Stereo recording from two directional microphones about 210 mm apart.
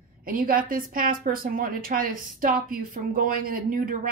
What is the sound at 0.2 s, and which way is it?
A woman's voice, 45° right (ahead or behind).